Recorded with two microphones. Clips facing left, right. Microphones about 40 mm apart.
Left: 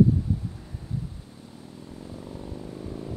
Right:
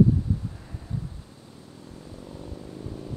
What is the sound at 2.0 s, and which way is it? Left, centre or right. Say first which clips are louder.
Vehicle: left 2 dB; centre.